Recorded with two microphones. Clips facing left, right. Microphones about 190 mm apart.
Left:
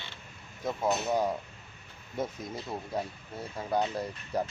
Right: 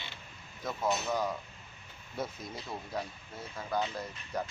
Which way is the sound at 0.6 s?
25° left (ahead or behind).